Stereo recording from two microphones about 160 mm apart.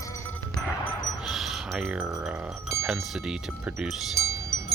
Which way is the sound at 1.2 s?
Centre (ahead or behind).